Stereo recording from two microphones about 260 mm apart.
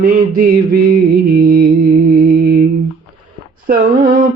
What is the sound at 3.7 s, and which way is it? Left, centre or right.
Mantra, right.